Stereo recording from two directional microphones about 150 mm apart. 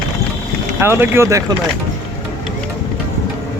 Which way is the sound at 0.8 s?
15° right (ahead or behind).